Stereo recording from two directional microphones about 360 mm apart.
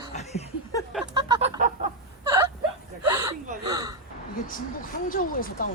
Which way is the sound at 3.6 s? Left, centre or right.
Centre.